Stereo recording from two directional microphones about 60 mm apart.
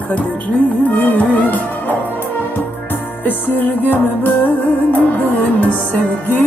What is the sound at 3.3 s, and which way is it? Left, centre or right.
Music, left.